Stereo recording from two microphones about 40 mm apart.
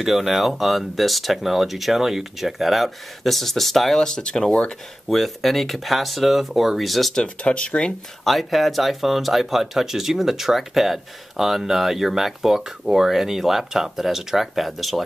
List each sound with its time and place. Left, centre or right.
0.0 s speech: centre
4.0 s speech: centre
4.6 s speech: centre
7.4 s speech: left
8.2 s speech: centre